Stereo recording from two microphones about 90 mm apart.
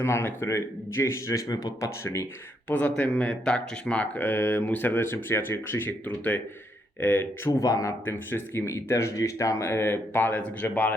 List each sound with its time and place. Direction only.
0.0 s speech: 25° left (ahead or behind); by 1.9 s 45° left (ahead or behind)
2.6 s speech: 15° left (ahead or behind)
7.6 s speech: 45° left (ahead or behind)
7.9 s speech: 25° left (ahead or behind)